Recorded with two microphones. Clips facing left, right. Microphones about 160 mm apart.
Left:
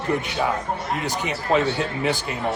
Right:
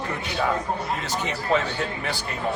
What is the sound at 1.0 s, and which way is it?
Speech, 15° left (ahead or behind).